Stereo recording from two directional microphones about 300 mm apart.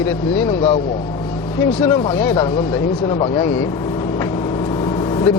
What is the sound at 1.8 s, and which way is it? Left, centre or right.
Speech, centre.